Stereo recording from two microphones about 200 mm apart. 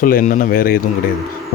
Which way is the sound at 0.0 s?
45° left (ahead or behind).